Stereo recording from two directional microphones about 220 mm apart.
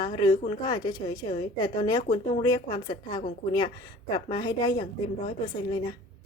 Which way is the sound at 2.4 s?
15° left (ahead or behind).